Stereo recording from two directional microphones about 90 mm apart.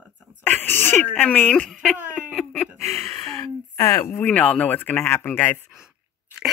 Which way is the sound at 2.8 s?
30° left (ahead or behind).